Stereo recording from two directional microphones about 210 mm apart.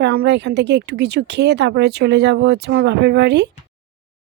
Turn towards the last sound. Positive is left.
turn(degrees=-55)  # may be behind; listen again after turning